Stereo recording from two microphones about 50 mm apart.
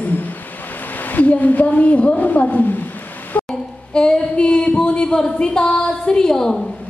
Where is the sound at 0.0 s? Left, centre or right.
Left.